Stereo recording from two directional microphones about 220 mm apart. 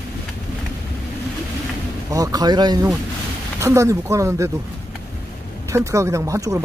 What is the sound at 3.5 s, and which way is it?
Speech, 15° right (ahead or behind).